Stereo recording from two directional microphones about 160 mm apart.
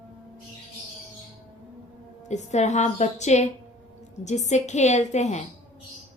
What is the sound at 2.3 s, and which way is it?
A woman's voice, 45° left (ahead or behind).